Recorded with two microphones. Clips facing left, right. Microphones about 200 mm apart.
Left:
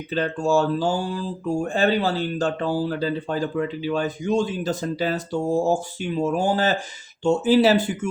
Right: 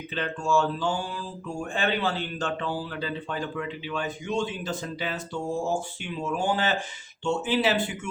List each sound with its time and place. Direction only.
0.1 s speech: 40° left (ahead or behind)